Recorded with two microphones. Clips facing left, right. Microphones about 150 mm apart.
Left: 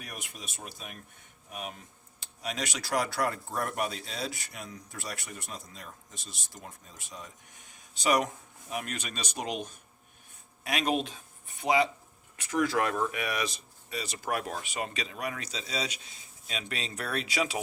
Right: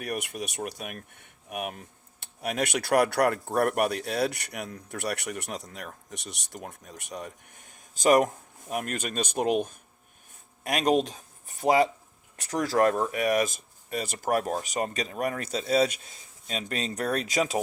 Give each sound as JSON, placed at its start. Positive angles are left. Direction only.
{"t": 0.0, "sound": "speech", "side_deg": -65}